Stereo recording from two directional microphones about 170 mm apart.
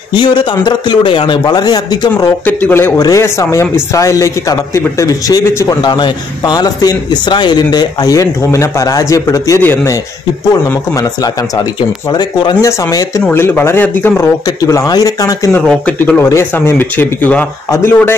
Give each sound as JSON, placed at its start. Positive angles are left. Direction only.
{"t": 0.1, "sound": "speech", "side_deg": 25}
{"t": 2.4, "sound": "speech", "side_deg": 10}
{"t": 15.6, "sound": "speech", "side_deg": 5}